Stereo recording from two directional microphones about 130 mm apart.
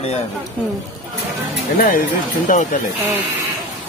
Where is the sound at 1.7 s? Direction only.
90° left.